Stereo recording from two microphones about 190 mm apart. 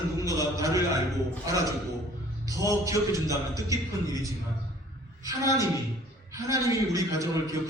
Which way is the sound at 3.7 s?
15° right (ahead or behind).